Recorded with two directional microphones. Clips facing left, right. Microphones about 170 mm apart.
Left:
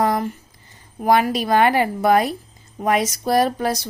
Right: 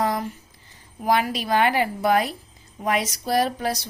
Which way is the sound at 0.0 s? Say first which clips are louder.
Left 4 dB; 50° left (ahead or behind).